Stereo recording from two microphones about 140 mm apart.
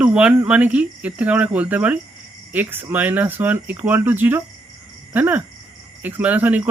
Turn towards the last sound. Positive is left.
turn(degrees=-10)  # may be behind; listen again after turning